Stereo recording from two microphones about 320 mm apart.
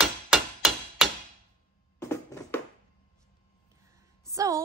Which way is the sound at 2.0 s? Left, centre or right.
Centre.